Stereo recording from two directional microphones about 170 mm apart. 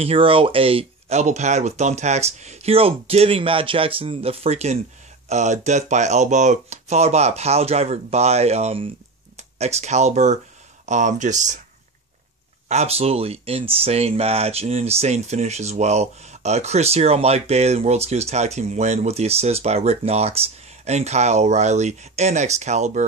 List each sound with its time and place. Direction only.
0.0 s speech: 30° right (ahead or behind)
12.6 s speech: 40° right (ahead or behind)